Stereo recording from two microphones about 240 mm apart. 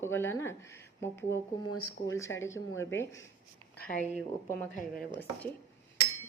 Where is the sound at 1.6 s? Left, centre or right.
Left.